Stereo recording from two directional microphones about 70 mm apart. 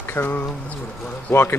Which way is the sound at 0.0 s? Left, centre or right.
Left.